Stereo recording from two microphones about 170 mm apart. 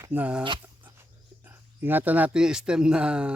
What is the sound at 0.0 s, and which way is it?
Speech, 10° right (ahead or behind).